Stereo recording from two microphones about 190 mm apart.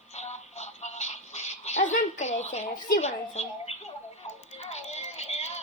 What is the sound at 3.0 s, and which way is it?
Speech, 35° left (ahead or behind).